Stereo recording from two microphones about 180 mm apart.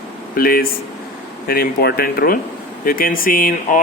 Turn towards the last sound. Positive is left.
turn(degrees=50)  # may be behind; listen again after turning